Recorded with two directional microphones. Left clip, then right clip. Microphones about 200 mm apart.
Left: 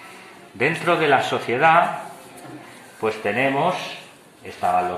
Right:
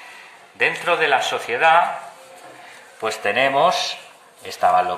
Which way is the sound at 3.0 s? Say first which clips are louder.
Right 2 dB; 30° right (ahead or behind).